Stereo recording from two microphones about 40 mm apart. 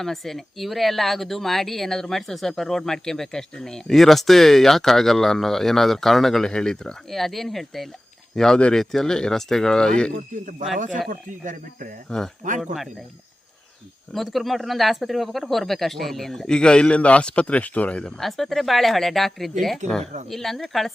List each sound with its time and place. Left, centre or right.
0.0 s speech: centre
6.4 s speech: centre
7.1 s speech: centre; by 10.1 s left
12.0 s speech: centre
12.5 s speech: centre
14.1 s speech: centre; by 18.0 s left
18.2 s speech: centre